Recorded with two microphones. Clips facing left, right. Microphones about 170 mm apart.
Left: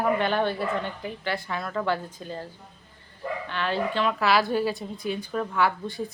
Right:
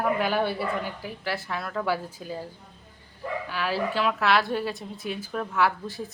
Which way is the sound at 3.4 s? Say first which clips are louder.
Left 1 dB; 5° right (ahead or behind).